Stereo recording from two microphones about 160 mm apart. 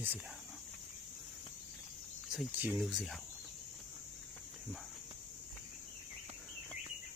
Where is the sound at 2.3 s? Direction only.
5° right (ahead or behind).